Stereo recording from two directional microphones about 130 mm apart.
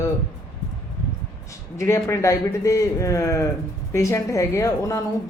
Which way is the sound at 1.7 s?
20° left (ahead or behind).